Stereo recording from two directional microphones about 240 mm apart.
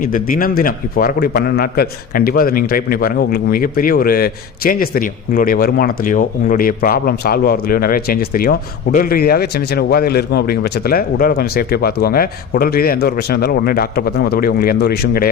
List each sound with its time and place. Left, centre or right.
0.0 s a man's voice: left